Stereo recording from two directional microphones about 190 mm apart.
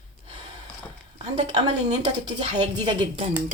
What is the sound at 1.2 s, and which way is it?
A woman's voice, 30° right (ahead or behind).